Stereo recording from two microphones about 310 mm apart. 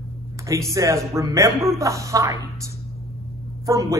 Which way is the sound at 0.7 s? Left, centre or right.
Centre.